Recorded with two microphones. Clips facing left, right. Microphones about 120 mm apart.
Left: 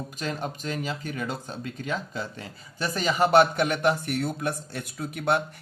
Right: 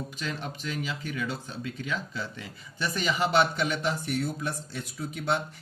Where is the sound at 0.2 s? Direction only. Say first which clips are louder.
Left 6 dB; 45° left (ahead or behind).